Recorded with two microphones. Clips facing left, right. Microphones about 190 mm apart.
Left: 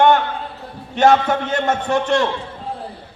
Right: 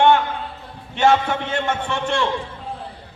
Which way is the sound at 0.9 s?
40° left (ahead or behind).